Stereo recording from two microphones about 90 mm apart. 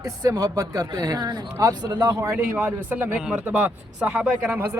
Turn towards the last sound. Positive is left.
turn(degrees=-10)  # may be behind; listen again after turning